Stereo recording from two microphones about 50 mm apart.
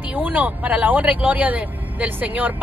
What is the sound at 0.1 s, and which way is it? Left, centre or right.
Speech, right.